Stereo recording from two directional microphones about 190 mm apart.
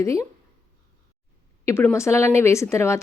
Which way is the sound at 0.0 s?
15° left (ahead or behind).